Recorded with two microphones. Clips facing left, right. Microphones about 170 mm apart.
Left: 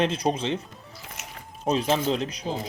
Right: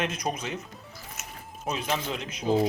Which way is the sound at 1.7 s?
30° left (ahead or behind).